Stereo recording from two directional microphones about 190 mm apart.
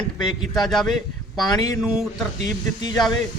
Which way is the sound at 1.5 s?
20° left (ahead or behind).